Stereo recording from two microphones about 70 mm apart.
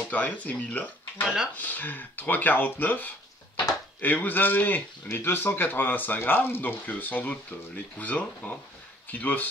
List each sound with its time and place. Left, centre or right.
0.1 s speech: left
1.2 s speech: centre
1.6 s speech: left